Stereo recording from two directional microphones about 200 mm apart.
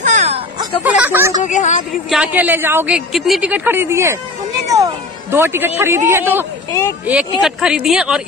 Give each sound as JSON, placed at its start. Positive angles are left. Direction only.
{"t": 0.0, "sound": "music", "side_deg": -35}
{"t": 0.8, "sound": "a woman's voice", "side_deg": -10}
{"t": 1.4, "sound": "a woman's voice", "side_deg": 35}
{"t": 2.0, "sound": "a woman's voice", "side_deg": -5}